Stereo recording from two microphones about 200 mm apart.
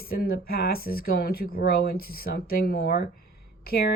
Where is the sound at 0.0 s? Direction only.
50° left (ahead or behind).